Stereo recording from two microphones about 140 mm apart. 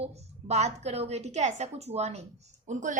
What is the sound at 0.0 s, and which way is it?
A woman's voice, 50° right (ahead or behind).